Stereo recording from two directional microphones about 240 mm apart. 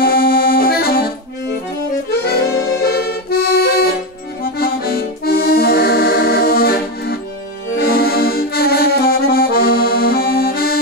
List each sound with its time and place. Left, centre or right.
0.0 s accordion: left